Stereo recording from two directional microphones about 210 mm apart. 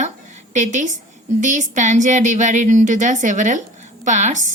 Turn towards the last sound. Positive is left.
turn(degrees=-35)  # may be behind; listen again after turning